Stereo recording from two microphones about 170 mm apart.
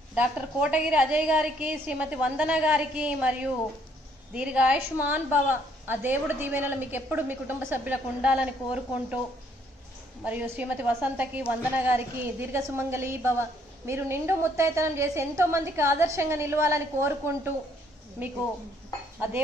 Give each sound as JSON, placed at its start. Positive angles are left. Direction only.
{"t": 0.1, "sound": "a woman's voice", "side_deg": -5}
{"t": 10.2, "sound": "a woman's voice", "side_deg": -10}